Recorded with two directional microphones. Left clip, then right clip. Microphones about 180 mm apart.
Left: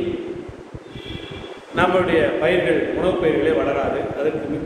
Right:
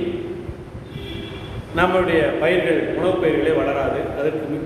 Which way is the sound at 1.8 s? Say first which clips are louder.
Even; centre (ahead or behind).